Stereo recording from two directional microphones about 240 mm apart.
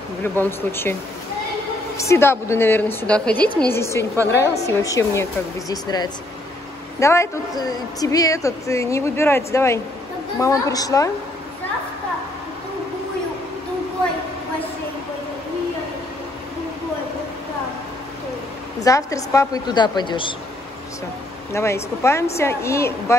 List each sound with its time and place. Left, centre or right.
0.2 s speech: centre
2.0 s speech: centre
18.9 s speech: centre
21.5 s speech: centre